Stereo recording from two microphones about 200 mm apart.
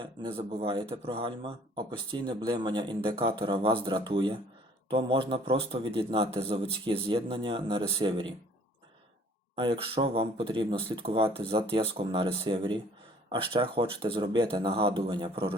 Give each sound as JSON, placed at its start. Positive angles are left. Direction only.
{"t": 0.0, "sound": "a man's voice", "side_deg": -25}
{"t": 9.6, "sound": "a man's voice", "side_deg": -25}